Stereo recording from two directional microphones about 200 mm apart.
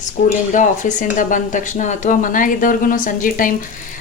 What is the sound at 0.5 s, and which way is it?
Speech, 40° left (ahead or behind).